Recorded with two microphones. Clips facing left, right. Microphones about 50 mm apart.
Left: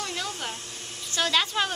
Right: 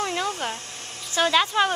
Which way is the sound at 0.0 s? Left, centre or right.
Right.